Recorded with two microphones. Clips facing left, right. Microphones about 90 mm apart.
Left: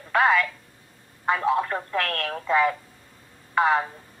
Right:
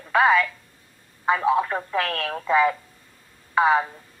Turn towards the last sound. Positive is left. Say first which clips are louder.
# right 2 dB
turn(degrees=-5)  # may be behind; listen again after turning